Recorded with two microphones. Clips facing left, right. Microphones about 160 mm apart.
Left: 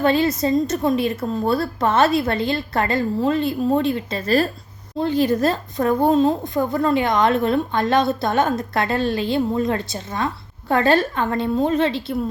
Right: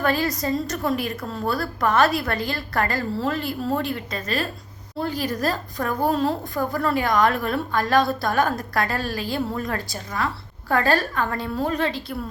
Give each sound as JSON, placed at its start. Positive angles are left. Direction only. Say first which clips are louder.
{"t": 0.0, "sound": "a woman's voice", "louder": "left 5 dB", "side_deg": 25}